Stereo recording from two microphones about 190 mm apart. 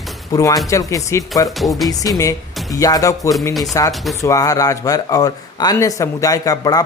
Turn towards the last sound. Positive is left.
turn(degrees=20)  # may be behind; listen again after turning